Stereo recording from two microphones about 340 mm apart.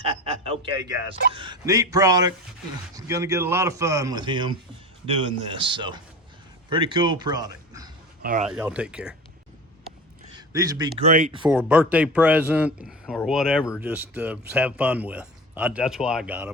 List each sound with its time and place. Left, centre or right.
0.0 s a sound: centre
1.3 s speech: centre
8.2 s speech: right
8.4 s speech: centre
10.3 s a man's voice: centre